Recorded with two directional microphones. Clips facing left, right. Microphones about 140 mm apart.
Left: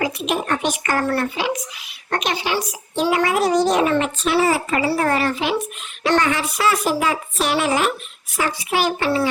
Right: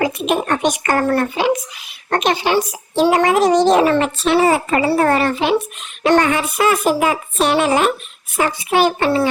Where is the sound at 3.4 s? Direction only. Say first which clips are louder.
Right 5 dB; 25° right (ahead or behind).